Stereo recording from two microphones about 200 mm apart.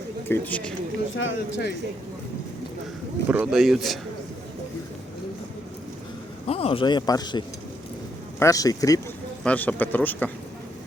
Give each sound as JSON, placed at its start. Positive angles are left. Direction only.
{"t": 0.3, "sound": "speech", "side_deg": 10}
{"t": 1.1, "sound": "speech", "side_deg": 65}
{"t": 3.2, "sound": "speech", "side_deg": -5}
{"t": 6.5, "sound": "a man's voice", "side_deg": 30}
{"t": 9.4, "sound": "speech", "side_deg": 5}